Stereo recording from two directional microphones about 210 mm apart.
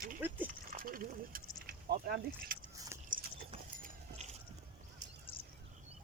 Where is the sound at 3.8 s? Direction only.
30° right (ahead or behind).